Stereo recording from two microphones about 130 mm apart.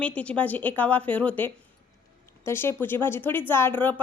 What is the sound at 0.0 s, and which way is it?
A woman's voice, 10° left (ahead or behind).